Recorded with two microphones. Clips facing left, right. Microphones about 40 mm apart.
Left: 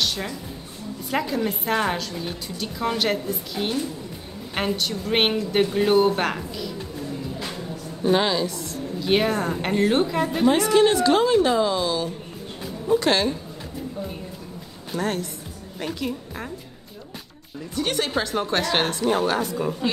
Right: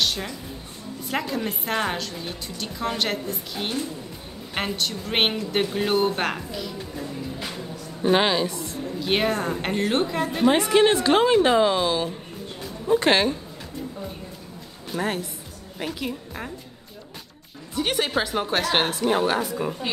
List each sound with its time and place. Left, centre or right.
0.0 s music: centre
1.1 s a woman's voice: centre
7.5 s music: right
9.0 s a woman's voice: centre
10.4 s a woman's voice: centre
15.0 s a woman's voice: centre
17.7 s a woman's voice: centre